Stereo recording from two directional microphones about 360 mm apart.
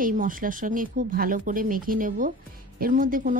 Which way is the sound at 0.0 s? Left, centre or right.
Right.